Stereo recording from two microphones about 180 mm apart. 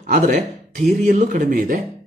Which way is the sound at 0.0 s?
45° right (ahead or behind).